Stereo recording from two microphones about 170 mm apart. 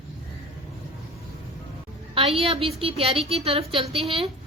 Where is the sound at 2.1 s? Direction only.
35° right (ahead or behind).